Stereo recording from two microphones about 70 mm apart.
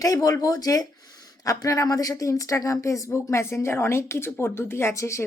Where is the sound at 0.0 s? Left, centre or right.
Left.